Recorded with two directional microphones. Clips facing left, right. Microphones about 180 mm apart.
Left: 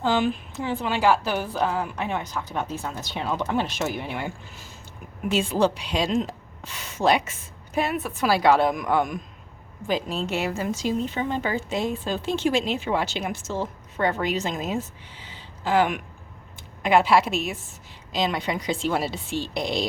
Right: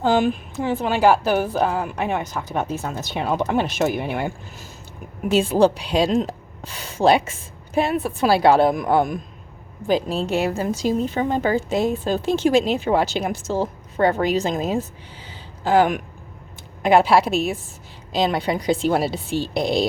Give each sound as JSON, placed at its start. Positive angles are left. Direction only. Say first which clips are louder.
{"t": 0.0, "sound": "a woman's voice", "louder": "right 4 dB", "side_deg": -45}
{"t": 5.3, "sound": "a woman's voice", "louder": "right 6 dB", "side_deg": -35}